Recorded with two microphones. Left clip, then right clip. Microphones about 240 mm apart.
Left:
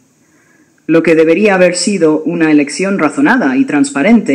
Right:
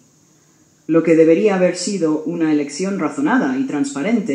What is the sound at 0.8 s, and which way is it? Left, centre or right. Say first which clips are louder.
A man's voice: left 4 dB; left.